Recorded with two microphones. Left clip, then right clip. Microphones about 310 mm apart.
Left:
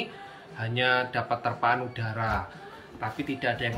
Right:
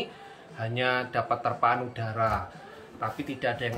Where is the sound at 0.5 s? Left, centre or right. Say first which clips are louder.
Left 2 dB; centre.